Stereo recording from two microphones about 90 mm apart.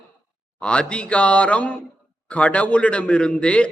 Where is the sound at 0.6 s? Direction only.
10° left (ahead or behind).